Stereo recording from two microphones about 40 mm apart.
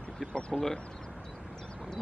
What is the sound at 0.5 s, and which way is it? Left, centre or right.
Speech, centre.